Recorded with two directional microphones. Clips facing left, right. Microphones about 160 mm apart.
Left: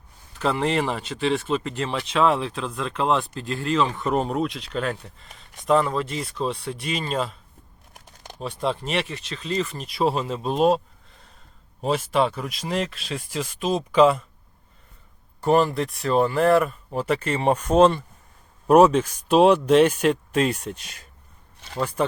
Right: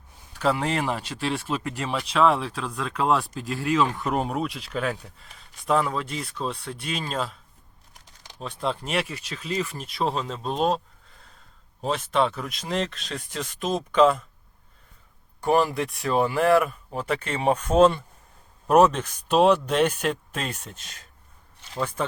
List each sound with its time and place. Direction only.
0.3 s speech: centre (ahead or behind)
7.9 s typing: 50° left (ahead or behind)
8.4 s speech: centre (ahead or behind)
11.8 s speech: 5° left (ahead or behind)
15.4 s speech: centre (ahead or behind)
18.7 s speech: 10° left (ahead or behind)